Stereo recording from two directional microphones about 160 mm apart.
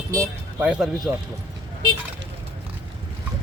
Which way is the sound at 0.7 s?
5° right (ahead or behind).